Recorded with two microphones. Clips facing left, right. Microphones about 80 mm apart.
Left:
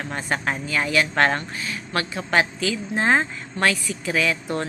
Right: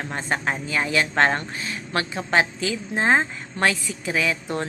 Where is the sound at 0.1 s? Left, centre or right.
Centre.